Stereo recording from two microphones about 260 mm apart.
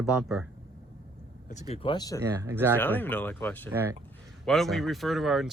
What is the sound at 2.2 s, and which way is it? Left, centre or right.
Speech, centre.